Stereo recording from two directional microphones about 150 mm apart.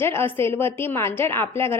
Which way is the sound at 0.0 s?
15° left (ahead or behind).